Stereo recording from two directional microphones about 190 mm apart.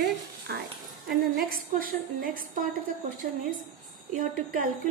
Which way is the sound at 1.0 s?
50° right (ahead or behind).